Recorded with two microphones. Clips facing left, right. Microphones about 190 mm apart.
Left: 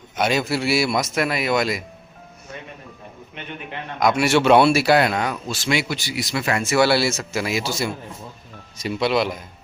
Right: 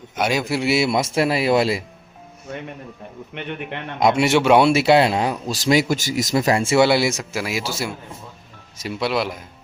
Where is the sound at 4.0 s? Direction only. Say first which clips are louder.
Right 1 dB; 25° right (ahead or behind).